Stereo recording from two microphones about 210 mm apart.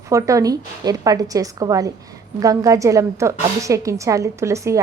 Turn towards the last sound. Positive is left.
turn(degrees=-15)  # may be behind; listen again after turning